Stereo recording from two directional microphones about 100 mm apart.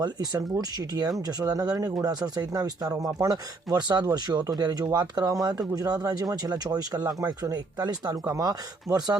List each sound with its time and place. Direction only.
0.0 s speech: 45° right (ahead or behind)